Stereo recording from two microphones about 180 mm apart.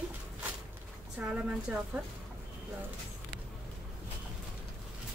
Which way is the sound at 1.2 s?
5° right (ahead or behind).